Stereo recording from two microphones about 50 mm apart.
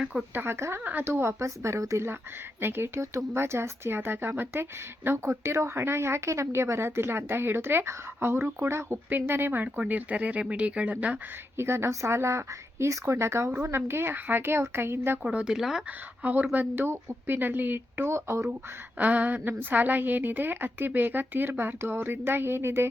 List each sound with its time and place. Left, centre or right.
0.3 s speech: right
2.6 s speech: right
3.0 s speech: right
5.0 s a woman's voice: right
9.6 s speech: right
11.5 s speech: right
15.2 s speech: right
15.4 s speech: centre
16.2 s a woman's voice: right
18.9 s a woman's voice: right